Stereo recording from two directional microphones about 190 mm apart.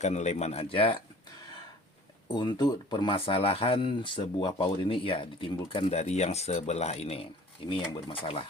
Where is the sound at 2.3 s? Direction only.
25° left (ahead or behind).